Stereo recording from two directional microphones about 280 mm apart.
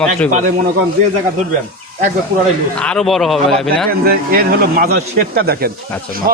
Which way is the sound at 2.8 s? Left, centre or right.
Centre.